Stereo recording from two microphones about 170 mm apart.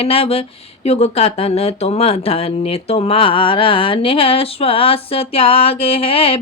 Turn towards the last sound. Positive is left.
turn(degrees=35)  # may be behind; listen again after turning